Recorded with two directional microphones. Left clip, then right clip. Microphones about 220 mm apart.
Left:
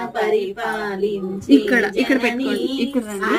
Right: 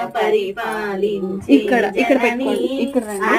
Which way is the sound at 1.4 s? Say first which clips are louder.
Right 1 dB; 25° left (ahead or behind).